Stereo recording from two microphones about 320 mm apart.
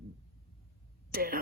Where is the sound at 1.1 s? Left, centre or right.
Right.